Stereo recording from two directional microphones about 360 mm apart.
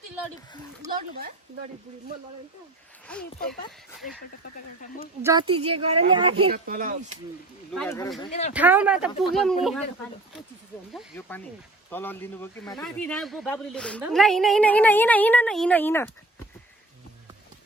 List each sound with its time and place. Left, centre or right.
0.9 s speech: right
3.1 s speech: centre
5.2 s speech: centre
7.7 s speech: centre
8.5 s speech: centre
10.9 s speech: centre